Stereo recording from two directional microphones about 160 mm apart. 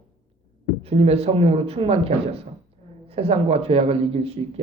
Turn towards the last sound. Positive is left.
turn(degrees=-35)  # may be behind; listen again after turning